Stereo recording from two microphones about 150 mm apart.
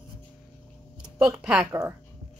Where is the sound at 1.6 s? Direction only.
15° right (ahead or behind).